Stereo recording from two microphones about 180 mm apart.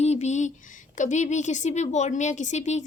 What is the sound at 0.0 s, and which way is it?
A woman's voice, 40° left (ahead or behind).